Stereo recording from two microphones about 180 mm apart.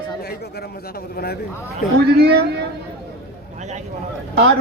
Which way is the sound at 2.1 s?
65° right (ahead or behind).